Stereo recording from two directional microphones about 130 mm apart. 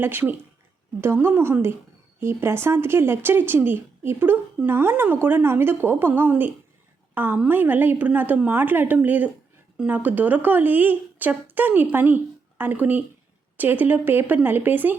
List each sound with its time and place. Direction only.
0.0 s a woman's voice: 15° right (ahead or behind)